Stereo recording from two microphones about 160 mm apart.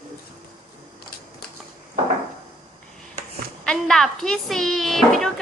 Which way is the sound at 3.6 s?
5° left (ahead or behind).